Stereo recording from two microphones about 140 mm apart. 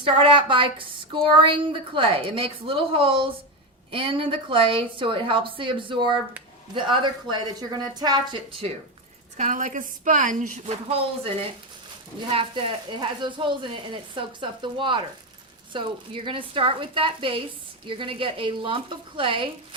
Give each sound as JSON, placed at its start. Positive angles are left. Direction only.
{"t": 0.0, "sound": "speech", "side_deg": -40}
{"t": 9.4, "sound": "a woman's voice", "side_deg": -65}
{"t": 10.8, "sound": "speech", "side_deg": -45}
{"t": 12.3, "sound": "speech", "side_deg": -40}